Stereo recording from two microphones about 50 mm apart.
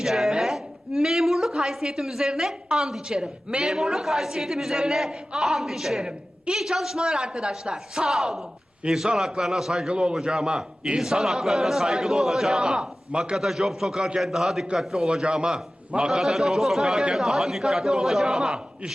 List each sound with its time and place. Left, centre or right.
0.0 s a woman's voice: centre
8.8 s a man's voice: right
9.9 s speech: centre
13.3 s speech: centre
16.2 s speech: centre